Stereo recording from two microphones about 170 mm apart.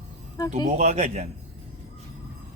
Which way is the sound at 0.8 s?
40° right (ahead or behind).